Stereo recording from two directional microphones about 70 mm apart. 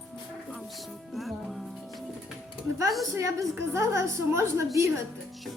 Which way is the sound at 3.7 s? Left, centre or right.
Right.